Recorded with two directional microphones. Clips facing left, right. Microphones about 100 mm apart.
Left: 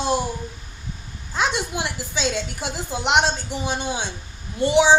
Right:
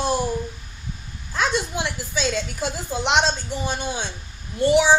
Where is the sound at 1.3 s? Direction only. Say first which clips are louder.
Even; 15° left (ahead or behind).